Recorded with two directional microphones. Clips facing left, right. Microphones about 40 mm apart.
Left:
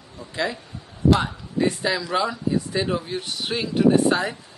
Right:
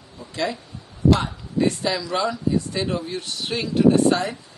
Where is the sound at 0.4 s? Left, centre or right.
Centre.